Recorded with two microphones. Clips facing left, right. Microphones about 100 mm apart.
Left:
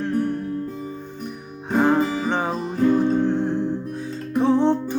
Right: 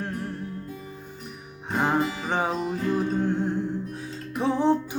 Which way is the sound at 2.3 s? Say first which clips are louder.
Left 2 dB; 5° right (ahead or behind).